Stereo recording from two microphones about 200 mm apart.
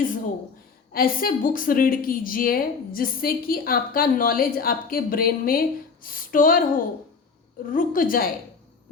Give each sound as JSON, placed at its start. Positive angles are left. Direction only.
{"t": 0.9, "sound": "a woman's voice", "side_deg": 45}
{"t": 7.7, "sound": "a woman's voice", "side_deg": 45}